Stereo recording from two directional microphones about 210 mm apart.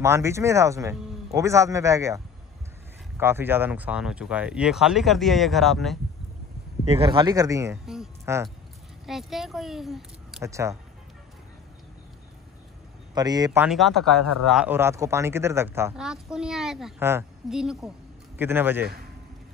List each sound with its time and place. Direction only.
0.0 s speech: 15° right (ahead or behind)
6.9 s speech: 25° right (ahead or behind)
7.8 s speech: centre (ahead or behind)
10.4 s speech: 15° right (ahead or behind)
13.1 s speech: 20° right (ahead or behind)
13.7 s speech: centre (ahead or behind)